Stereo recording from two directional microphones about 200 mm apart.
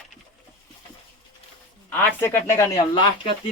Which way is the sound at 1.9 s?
10° left (ahead or behind).